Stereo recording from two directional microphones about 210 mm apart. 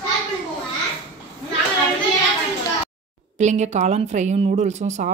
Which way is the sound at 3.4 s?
35° right (ahead or behind).